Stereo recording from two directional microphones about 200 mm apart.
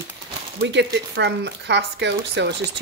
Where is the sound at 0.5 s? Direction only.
60° right (ahead or behind).